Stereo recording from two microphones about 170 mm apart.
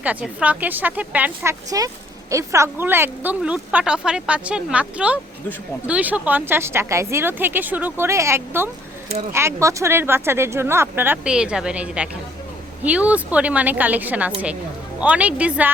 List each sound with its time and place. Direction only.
0.0 s speech: 10° right (ahead or behind)